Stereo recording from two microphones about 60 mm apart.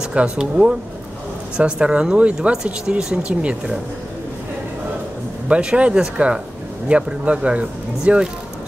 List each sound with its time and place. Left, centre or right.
0.1 s speech: centre
5.5 s speech: centre